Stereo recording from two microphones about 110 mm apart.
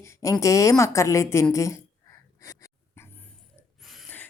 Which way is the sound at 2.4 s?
30° left (ahead or behind).